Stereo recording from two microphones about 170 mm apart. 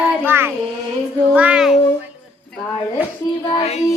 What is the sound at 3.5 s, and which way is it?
Music, 35° left (ahead or behind).